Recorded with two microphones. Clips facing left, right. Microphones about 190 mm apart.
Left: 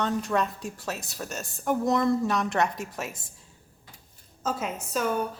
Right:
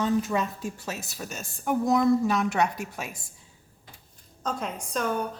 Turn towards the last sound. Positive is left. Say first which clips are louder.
# left 1 dB
turn(degrees=5)  # may be behind; listen again after turning